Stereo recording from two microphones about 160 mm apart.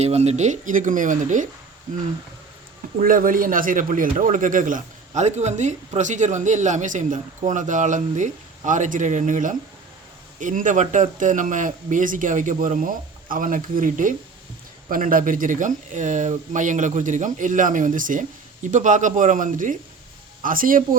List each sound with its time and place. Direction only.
0.0 s a man's voice: 40° right (ahead or behind); by 20.8 s 60° right (ahead or behind)